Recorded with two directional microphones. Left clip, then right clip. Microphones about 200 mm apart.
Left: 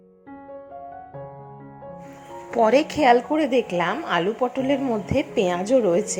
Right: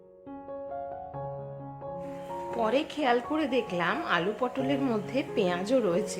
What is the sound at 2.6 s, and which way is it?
A woman's voice, 25° left (ahead or behind).